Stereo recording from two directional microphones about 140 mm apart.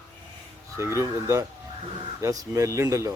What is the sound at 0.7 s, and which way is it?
Speech, 20° right (ahead or behind).